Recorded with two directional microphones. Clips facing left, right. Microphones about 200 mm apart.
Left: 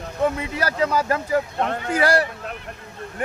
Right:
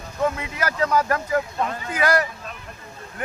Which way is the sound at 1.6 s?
65° left (ahead or behind).